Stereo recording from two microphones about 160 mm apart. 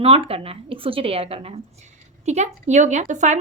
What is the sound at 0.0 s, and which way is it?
A woman's voice, 35° right (ahead or behind).